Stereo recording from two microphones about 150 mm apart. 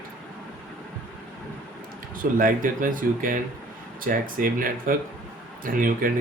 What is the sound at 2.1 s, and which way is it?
Speech, 65° right (ahead or behind).